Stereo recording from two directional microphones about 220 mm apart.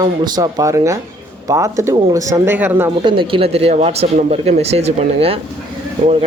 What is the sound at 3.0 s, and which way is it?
Speech, 25° right (ahead or behind).